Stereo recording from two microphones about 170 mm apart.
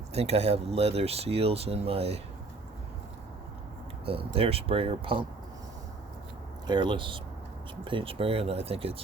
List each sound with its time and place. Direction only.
0.1 s speech: 40° right (ahead or behind)
4.0 s speech: 35° right (ahead or behind)
6.7 s speech: 25° right (ahead or behind)